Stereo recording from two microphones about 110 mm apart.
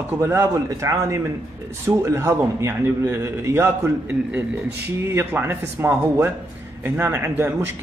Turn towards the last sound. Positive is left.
turn(degrees=-20)  # may be behind; listen again after turning